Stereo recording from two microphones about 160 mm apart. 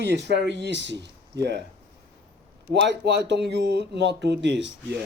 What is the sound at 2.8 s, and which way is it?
Speech, 90° right.